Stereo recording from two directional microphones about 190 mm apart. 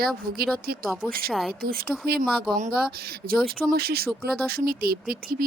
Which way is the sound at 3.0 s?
50° right (ahead or behind).